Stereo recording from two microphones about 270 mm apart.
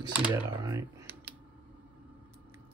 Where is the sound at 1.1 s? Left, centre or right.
Right.